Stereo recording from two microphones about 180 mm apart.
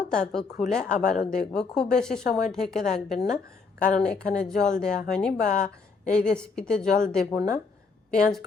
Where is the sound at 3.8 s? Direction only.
5° left (ahead or behind).